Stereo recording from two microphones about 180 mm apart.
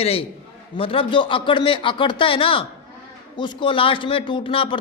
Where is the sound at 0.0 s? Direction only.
35° left (ahead or behind).